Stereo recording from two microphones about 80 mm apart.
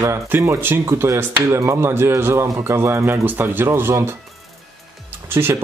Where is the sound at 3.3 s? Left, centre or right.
Right.